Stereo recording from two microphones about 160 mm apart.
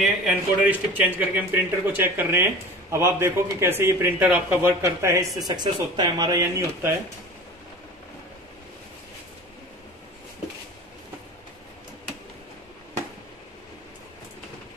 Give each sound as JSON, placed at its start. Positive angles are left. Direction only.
{"t": 0.0, "sound": "speech", "side_deg": 0}